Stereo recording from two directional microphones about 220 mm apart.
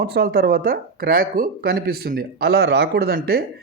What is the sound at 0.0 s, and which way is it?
Speech, 45° right (ahead or behind).